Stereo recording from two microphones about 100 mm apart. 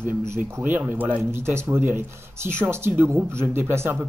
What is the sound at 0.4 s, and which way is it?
Speech, 20° right (ahead or behind).